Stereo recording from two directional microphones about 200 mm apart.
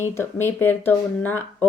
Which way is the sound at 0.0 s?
10° left (ahead or behind).